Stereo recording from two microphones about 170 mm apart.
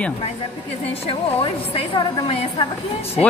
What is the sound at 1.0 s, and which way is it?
A woman's voice, 35° left (ahead or behind).